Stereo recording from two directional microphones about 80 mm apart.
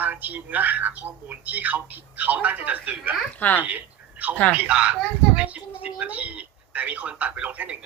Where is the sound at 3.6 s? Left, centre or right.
Right.